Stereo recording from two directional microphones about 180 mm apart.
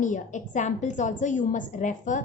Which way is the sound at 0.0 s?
45° left (ahead or behind).